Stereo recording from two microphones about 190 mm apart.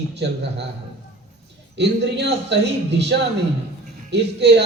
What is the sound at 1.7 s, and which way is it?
A man's voice, 65° right (ahead or behind).